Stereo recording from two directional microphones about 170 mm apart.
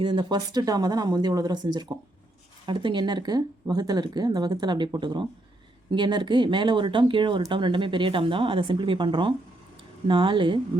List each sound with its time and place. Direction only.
0.0 s speech: 30° right (ahead or behind)